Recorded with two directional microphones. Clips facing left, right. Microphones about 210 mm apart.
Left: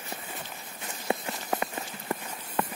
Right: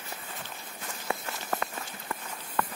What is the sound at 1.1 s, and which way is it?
Walk, 20° left (ahead or behind).